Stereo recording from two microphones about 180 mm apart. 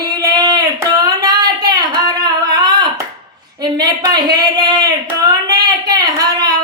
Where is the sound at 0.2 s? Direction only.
20° right (ahead or behind).